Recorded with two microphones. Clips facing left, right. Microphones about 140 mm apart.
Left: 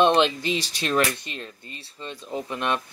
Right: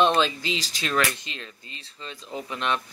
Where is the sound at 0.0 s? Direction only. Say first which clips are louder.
Left 2 dB; 20° left (ahead or behind).